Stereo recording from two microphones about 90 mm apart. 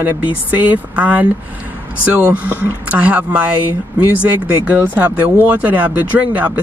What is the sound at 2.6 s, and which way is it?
Speech, 20° right (ahead or behind).